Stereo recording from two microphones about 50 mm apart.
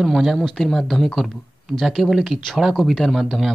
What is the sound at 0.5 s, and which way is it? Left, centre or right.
Speech, centre.